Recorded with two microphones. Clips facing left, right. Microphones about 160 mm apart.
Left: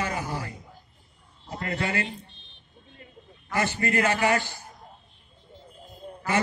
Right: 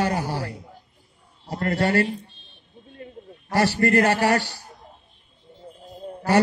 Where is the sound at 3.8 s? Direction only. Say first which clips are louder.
Right 5 dB; 40° right (ahead or behind).